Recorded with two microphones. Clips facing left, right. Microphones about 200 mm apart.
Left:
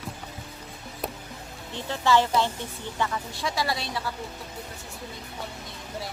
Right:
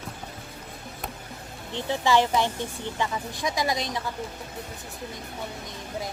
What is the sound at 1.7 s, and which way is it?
Speech, 15° right (ahead or behind).